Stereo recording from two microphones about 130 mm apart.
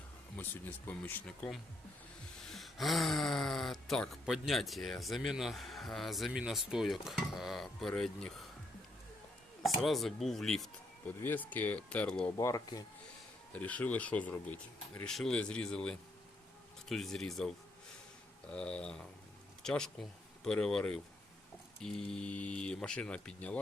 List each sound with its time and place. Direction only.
0.3 s speech: 15° left (ahead or behind)
9.6 s speech: centre (ahead or behind)
11.2 s speech: 15° left (ahead or behind)
12.4 s speech: 25° left (ahead or behind)
13.5 s speech: 10° left (ahead or behind)